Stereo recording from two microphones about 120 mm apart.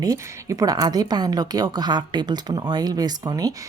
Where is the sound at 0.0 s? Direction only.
30° right (ahead or behind).